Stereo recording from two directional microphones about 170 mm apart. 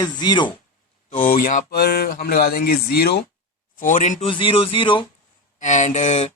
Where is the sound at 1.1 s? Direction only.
55° left (ahead or behind).